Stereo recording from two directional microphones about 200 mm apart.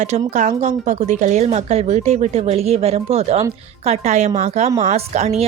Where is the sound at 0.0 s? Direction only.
35° right (ahead or behind).